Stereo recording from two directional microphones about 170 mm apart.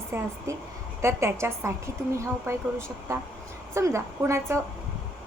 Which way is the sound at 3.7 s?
15° right (ahead or behind).